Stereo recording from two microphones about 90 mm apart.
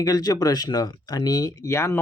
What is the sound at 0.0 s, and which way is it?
Speech, 45° left (ahead or behind).